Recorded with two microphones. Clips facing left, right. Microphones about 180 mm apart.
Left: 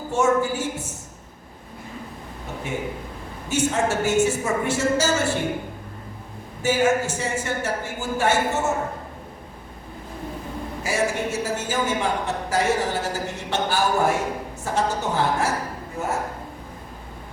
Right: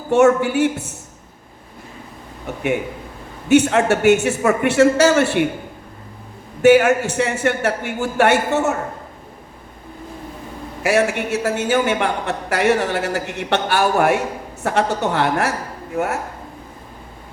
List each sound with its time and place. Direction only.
0.1 s speech: 70° right (ahead or behind)
3.5 s speech: 65° right (ahead or behind)
6.6 s speech: 65° right (ahead or behind)
10.8 s speech: 65° right (ahead or behind)